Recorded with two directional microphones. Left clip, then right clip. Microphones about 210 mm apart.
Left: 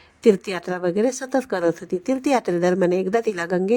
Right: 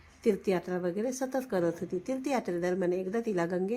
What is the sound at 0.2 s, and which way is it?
A woman's voice, 45° left (ahead or behind).